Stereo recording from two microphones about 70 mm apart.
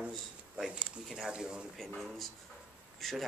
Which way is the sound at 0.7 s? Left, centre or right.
Centre.